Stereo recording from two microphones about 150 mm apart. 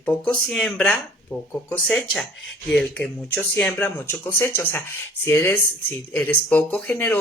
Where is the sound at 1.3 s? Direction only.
25° left (ahead or behind).